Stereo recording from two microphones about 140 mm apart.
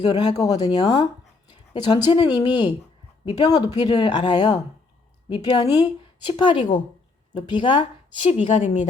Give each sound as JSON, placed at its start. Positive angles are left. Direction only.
{"t": 0.0, "sound": "speech", "side_deg": 30}
{"t": 8.3, "sound": "a woman's voice", "side_deg": 55}